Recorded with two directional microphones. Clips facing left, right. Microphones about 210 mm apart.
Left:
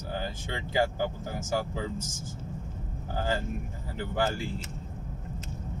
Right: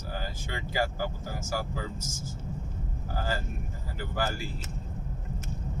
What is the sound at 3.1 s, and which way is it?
Speech, 20° left (ahead or behind).